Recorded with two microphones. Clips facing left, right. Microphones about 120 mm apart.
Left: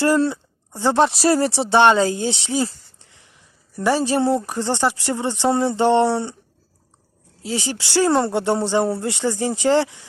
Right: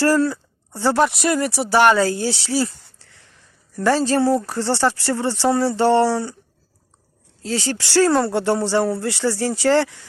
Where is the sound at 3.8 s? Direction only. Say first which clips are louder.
Right 1 dB; 15° left (ahead or behind).